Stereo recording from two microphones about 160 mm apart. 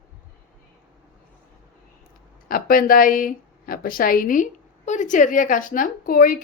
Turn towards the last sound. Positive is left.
turn(degrees=60)  # may be behind; listen again after turning